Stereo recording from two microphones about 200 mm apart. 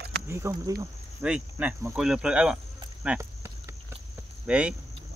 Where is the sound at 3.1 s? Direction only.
15° right (ahead or behind).